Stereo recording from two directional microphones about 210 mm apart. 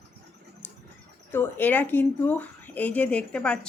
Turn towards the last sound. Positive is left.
turn(degrees=5)  # may be behind; listen again after turning